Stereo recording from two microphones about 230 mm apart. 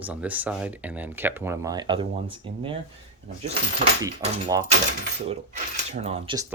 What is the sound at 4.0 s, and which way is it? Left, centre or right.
Speech, centre.